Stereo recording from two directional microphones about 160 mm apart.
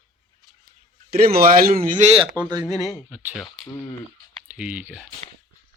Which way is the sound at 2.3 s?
25° right (ahead or behind).